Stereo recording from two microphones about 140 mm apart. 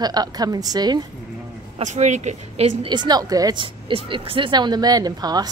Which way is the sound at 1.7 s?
55° right (ahead or behind).